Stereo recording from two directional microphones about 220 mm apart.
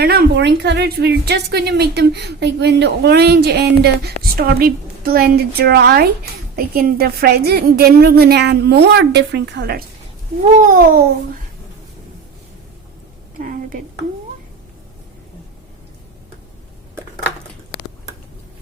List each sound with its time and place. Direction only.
0.0 s speech: 45° right (ahead or behind)
10.4 s babbling: 40° right (ahead or behind)